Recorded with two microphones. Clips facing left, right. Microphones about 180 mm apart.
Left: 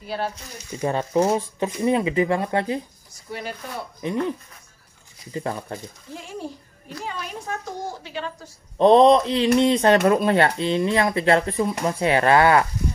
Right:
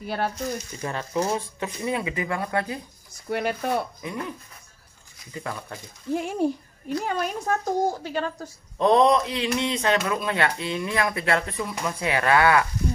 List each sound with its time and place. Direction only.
0.0 s a woman's voice: 50° right (ahead or behind)
0.7 s speech: 30° left (ahead or behind)
3.3 s speech: 60° right (ahead or behind)
4.0 s speech: 25° left (ahead or behind)
6.1 s a woman's voice: 60° right (ahead or behind)
8.7 s speech: 30° left (ahead or behind)